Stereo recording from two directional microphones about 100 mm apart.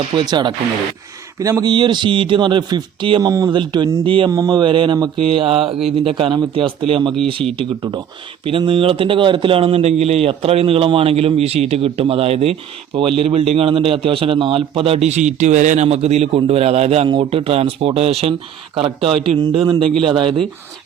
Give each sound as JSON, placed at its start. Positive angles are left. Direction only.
{"t": 0.2, "sound": "speech", "side_deg": -45}
{"t": 1.4, "sound": "speech", "side_deg": -35}
{"t": 1.7, "sound": "speech", "side_deg": -50}
{"t": 3.5, "sound": "speech", "side_deg": -50}
{"t": 4.3, "sound": "speech", "side_deg": -40}
{"t": 8.4, "sound": "a man's voice", "side_deg": -65}
{"t": 17.1, "sound": "speech", "side_deg": -60}
{"t": 18.8, "sound": "speech", "side_deg": -70}
{"t": 20.0, "sound": "speech", "side_deg": -60}